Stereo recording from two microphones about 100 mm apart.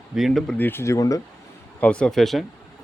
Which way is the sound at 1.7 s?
10° left (ahead or behind).